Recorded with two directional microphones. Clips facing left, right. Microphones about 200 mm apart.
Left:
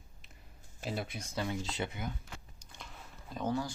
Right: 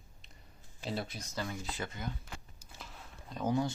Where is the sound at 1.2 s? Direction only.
20° left (ahead or behind).